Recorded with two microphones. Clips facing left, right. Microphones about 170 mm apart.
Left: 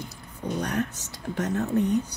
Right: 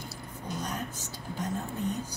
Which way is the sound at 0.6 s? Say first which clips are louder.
Left 8 dB; 70° left (ahead or behind).